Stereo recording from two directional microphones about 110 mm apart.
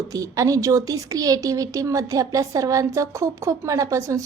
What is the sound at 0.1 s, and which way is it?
A woman's voice, 30° right (ahead or behind).